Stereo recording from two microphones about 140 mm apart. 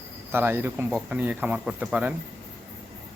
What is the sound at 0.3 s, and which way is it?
Speech, 15° right (ahead or behind).